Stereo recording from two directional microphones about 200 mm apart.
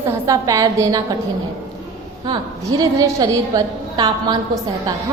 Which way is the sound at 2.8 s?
15° right (ahead or behind).